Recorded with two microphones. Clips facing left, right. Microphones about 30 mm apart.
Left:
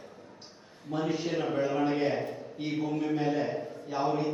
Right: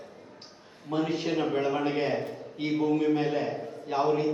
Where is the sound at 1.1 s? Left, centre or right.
Right.